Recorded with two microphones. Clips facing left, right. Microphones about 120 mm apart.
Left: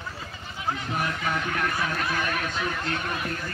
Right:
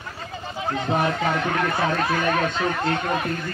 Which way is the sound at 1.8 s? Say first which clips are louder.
Right 6 dB; 30° right (ahead or behind).